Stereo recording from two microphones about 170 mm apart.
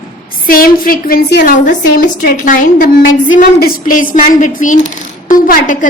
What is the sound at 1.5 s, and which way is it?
A woman's voice, 55° left (ahead or behind).